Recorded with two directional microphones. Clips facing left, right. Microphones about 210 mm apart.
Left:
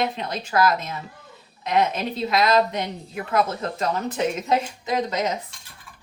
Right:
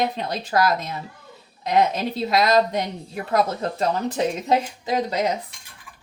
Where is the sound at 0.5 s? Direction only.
35° right (ahead or behind).